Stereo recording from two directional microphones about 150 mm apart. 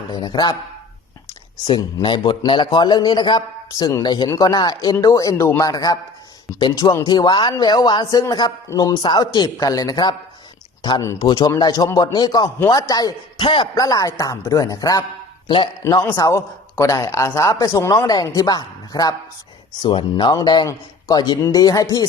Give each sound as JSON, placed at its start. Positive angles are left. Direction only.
{"t": 0.1, "sound": "a man's voice", "side_deg": 25}
{"t": 1.6, "sound": "a man's voice", "side_deg": 30}